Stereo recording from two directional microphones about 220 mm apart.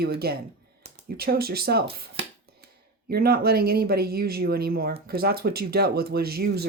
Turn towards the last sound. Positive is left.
turn(degrees=-45)  # may be behind; listen again after turning